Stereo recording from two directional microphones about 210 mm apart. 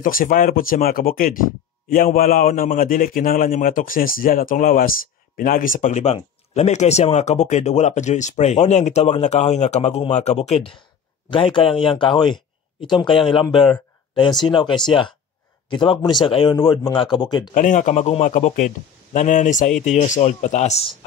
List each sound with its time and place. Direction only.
0.0 s a man's voice: 40° left (ahead or behind); by 14.7 s 20° left (ahead or behind)
15.7 s speech: 20° left (ahead or behind)
17.6 s a man's voice: 35° left (ahead or behind)